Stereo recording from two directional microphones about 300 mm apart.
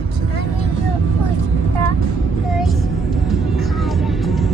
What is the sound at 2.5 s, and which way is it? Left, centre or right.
Music, centre.